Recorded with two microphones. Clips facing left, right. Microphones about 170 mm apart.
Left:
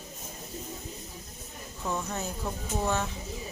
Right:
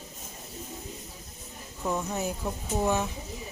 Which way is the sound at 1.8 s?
15° right (ahead or behind).